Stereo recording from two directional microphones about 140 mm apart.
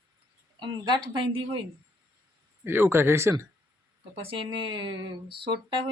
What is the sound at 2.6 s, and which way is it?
Speech, 15° right (ahead or behind).